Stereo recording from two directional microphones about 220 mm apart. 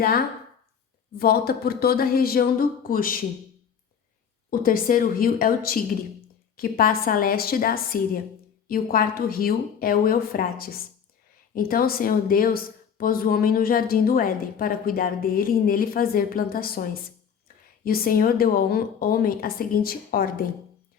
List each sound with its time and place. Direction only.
1.2 s speech: 45° left (ahead or behind)
4.5 s speech: 40° left (ahead or behind)